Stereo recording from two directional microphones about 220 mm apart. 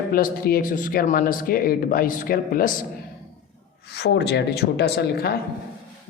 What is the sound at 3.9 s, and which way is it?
Speech, 50° left (ahead or behind).